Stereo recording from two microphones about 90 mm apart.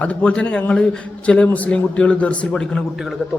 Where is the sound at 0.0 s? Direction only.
15° left (ahead or behind).